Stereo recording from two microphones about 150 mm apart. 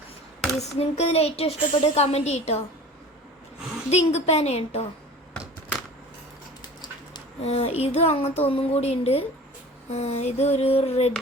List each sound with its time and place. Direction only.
0.6 s a woman's voice: 45° left (ahead or behind)
3.8 s a woman's voice: 45° left (ahead or behind)
7.4 s a woman's voice: 40° left (ahead or behind)